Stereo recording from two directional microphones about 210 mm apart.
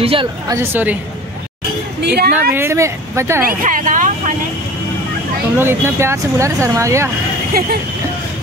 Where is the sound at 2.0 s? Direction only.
45° right (ahead or behind).